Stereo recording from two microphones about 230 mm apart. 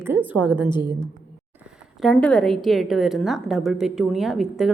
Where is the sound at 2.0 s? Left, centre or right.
Centre.